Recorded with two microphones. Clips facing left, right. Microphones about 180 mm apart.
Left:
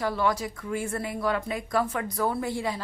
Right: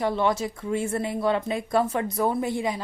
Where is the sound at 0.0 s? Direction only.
25° right (ahead or behind).